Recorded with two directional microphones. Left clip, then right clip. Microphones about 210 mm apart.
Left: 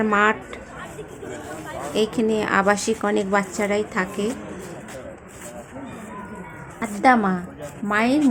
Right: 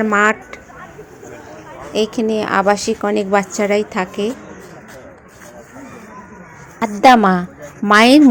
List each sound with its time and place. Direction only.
0.0 s a woman's voice: 15° right (ahead or behind)
1.9 s a woman's voice: 15° right (ahead or behind)
7.0 s a woman's voice: 35° right (ahead or behind)